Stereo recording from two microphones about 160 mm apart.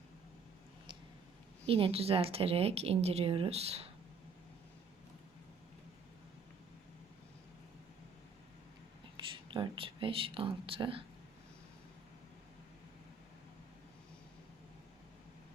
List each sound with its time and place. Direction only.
1.6 s speech: 35° right (ahead or behind)
9.1 s speech: 30° right (ahead or behind)